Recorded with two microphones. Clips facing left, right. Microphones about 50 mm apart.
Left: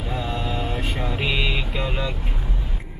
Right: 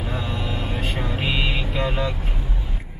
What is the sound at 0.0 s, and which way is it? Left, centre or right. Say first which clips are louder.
Music: left 1 dB; centre.